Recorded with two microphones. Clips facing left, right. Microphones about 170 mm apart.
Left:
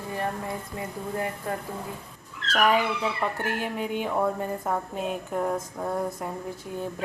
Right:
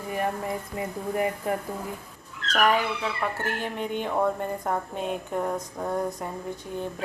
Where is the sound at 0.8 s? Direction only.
20° right (ahead or behind).